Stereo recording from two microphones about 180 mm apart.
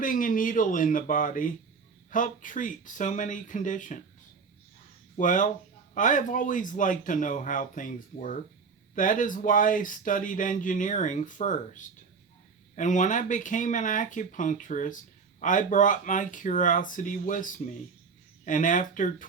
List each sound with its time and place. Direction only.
0.0 s speech: 50° left (ahead or behind)
5.1 s speech: 45° left (ahead or behind)
12.7 s speech: 45° left (ahead or behind)